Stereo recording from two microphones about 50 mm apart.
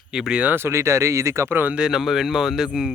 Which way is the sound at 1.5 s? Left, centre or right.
Right.